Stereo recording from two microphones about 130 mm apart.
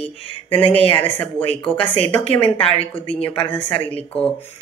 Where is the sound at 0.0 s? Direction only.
40° left (ahead or behind).